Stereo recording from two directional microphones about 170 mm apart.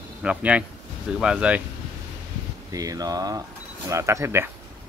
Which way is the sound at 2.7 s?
20° right (ahead or behind).